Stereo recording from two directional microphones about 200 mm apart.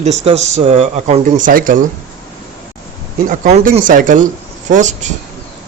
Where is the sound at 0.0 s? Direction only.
35° right (ahead or behind).